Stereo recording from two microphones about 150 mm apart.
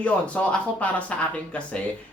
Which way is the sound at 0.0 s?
10° left (ahead or behind).